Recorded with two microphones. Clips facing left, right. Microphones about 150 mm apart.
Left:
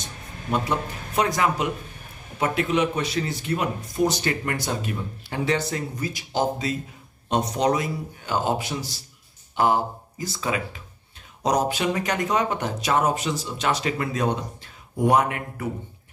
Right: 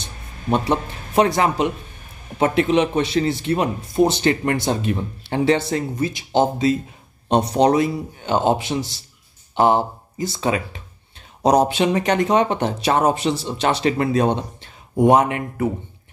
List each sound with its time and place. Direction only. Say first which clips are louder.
0.5 s speech: right 5 dB; 25° right (ahead or behind)